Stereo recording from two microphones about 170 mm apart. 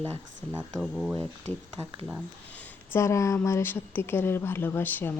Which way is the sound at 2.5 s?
15° left (ahead or behind).